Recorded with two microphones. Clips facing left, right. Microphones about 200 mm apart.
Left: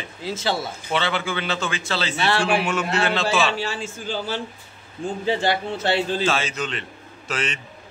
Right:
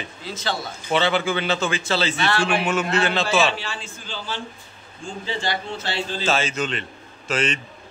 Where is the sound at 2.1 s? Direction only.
30° left (ahead or behind).